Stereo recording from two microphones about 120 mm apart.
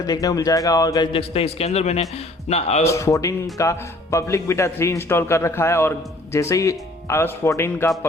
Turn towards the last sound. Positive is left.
turn(degrees=25)  # may be behind; listen again after turning